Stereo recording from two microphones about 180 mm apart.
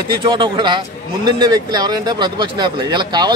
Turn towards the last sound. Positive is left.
turn(degrees=-25)  # may be behind; listen again after turning